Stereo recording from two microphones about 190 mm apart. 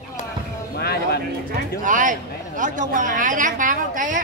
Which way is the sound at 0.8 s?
55° left (ahead or behind).